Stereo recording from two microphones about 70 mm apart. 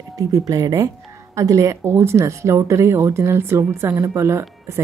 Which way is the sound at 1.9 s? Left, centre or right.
Right.